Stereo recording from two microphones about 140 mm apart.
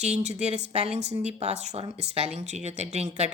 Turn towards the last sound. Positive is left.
turn(degrees=-50)  # may be behind; listen again after turning